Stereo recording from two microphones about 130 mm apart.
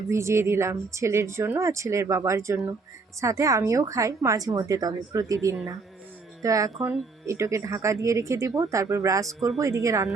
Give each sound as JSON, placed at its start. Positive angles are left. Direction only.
{"t": 0.1, "sound": "speech", "side_deg": -20}